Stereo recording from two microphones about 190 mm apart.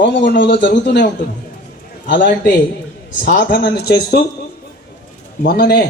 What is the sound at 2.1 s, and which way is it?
Speech, 65° left (ahead or behind).